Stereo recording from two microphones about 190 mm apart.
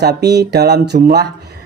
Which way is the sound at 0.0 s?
60° right (ahead or behind).